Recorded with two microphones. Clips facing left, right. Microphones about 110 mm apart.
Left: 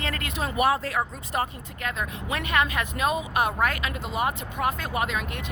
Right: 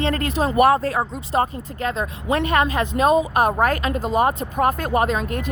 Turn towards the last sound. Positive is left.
turn(degrees=-40)  # may be behind; listen again after turning